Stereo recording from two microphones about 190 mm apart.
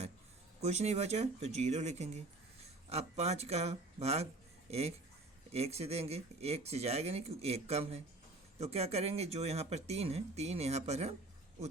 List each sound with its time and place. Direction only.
0.6 s speech: 35° right (ahead or behind)